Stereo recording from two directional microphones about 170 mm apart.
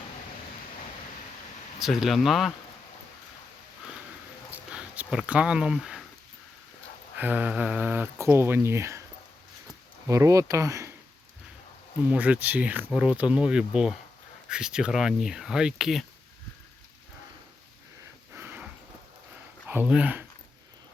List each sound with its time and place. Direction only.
1.8 s speech: centre (ahead or behind)
4.5 s a sound: 10° right (ahead or behind)
7.2 s speech: 10° right (ahead or behind)
10.1 s speech: 20° right (ahead or behind)
12.0 s speech: 10° right (ahead or behind)
18.3 s a sound: 10° right (ahead or behind)
19.6 s speech: 10° right (ahead or behind)